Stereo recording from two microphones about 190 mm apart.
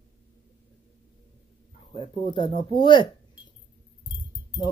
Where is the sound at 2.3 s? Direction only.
25° left (ahead or behind).